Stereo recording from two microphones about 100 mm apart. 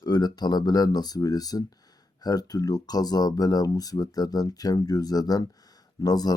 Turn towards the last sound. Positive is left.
turn(degrees=40)  # may be behind; listen again after turning